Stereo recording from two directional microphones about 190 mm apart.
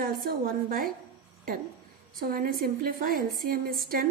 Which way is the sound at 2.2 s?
50° right (ahead or behind).